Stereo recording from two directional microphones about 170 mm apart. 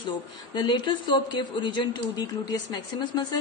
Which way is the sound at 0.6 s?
30° left (ahead or behind).